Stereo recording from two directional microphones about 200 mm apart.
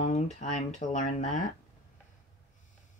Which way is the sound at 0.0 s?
35° left (ahead or behind).